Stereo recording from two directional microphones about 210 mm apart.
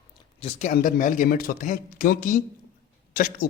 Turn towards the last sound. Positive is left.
turn(degrees=40)  # may be behind; listen again after turning